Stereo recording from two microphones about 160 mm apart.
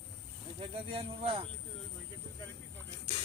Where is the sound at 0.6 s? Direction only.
35° right (ahead or behind).